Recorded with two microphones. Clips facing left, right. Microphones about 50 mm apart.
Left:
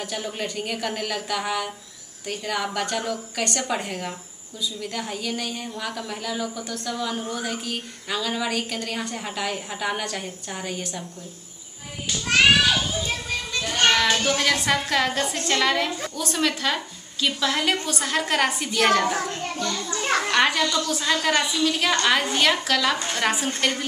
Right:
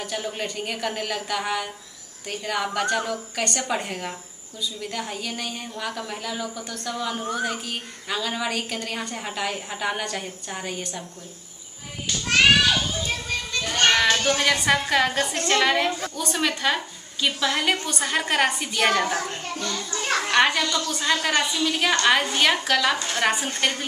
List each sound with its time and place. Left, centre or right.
0.0 s a woman's voice: centre
12.1 s a child's voice: centre
20.0 s children playing: centre
20.2 s a child's voice: centre